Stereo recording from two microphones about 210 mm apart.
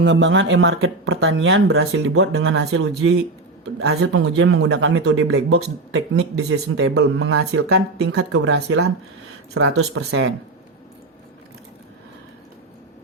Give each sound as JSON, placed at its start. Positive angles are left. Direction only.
{"t": 0.0, "sound": "speech", "side_deg": -60}
{"t": 4.1, "sound": "speech", "side_deg": -75}
{"t": 5.5, "sound": "speech", "side_deg": -60}